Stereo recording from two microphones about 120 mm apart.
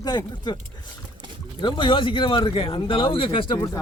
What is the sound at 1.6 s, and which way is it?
Speech, 45° left (ahead or behind).